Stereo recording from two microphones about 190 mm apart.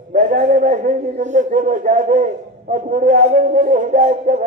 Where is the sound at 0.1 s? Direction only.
45° right (ahead or behind).